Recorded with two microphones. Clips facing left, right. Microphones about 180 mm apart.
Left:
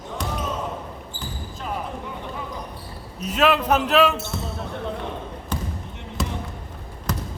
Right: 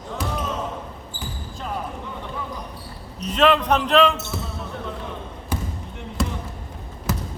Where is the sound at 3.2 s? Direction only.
5° left (ahead or behind).